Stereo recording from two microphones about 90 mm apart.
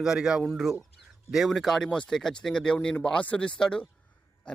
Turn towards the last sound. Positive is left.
turn(degrees=10)  # may be behind; listen again after turning